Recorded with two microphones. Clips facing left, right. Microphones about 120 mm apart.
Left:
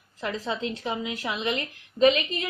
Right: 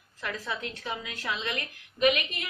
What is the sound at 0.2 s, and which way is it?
A woman's voice, 20° left (ahead or behind).